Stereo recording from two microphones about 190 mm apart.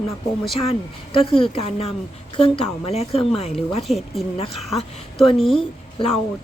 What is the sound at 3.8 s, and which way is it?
Speech, centre (ahead or behind).